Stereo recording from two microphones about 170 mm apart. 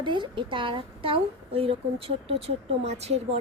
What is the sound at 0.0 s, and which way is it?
A woman's voice, 30° right (ahead or behind).